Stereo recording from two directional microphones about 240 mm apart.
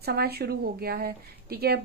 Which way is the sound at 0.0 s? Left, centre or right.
Right.